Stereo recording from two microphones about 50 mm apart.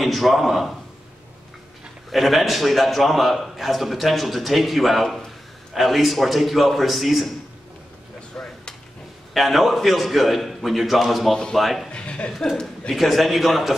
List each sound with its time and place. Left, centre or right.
0.0 s a man's voice: centre
2.0 s a man's voice: centre
8.3 s a sound: centre
9.3 s a man's voice: centre
11.9 s chuckle: left
12.9 s a man's voice: centre